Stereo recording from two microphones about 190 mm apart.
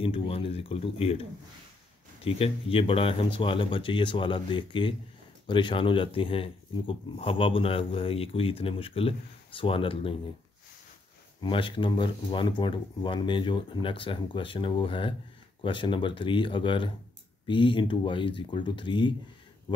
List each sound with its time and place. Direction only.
0.0 s speech: 30° left (ahead or behind)
2.2 s speech: 30° left (ahead or behind)
11.4 s speech: 25° left (ahead or behind)